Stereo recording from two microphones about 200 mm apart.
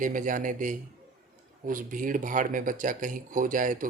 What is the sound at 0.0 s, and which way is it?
A man's voice, 40° right (ahead or behind).